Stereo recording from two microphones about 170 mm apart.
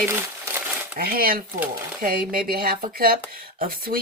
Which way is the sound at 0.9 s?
60° right (ahead or behind).